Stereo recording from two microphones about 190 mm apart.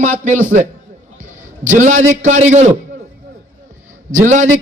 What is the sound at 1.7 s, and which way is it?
A man's voice, 40° right (ahead or behind).